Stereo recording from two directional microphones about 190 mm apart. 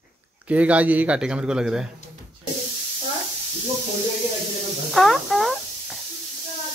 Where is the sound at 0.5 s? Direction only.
5° right (ahead or behind).